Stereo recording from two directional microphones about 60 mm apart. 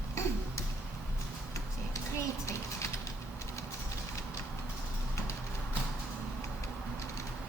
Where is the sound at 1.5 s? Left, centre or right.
Left.